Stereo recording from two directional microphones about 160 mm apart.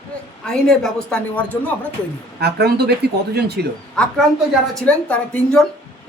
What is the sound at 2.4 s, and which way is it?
Speech, 90° right.